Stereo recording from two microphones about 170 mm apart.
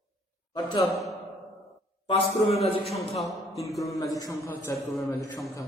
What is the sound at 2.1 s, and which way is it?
Speech, 35° left (ahead or behind).